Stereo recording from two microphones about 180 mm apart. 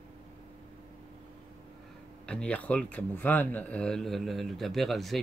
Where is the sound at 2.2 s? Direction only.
5° left (ahead or behind).